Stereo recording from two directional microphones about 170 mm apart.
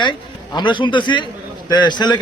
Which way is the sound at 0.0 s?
25° left (ahead or behind).